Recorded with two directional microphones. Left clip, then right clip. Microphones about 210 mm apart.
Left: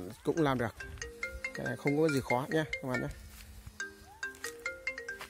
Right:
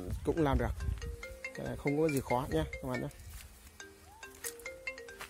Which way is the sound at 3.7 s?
40° left (ahead or behind).